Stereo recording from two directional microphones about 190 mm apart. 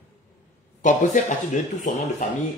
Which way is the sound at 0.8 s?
40° left (ahead or behind).